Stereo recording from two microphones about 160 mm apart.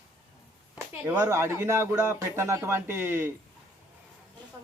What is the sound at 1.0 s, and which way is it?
Speech, 15° right (ahead or behind).